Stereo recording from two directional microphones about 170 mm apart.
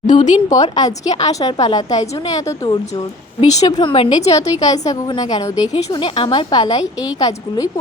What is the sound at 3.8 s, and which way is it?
A woman's voice, 30° left (ahead or behind).